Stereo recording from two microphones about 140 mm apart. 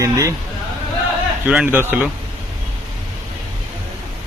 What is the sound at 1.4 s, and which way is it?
Speech, 10° right (ahead or behind).